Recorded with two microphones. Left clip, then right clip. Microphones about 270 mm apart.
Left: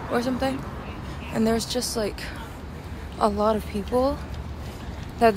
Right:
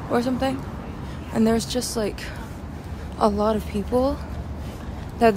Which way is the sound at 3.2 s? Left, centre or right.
Centre.